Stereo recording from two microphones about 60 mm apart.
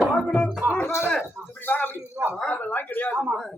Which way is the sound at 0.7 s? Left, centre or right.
Left.